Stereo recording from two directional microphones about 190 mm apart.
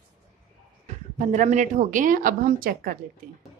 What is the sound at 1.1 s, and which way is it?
Speech, 40° right (ahead or behind).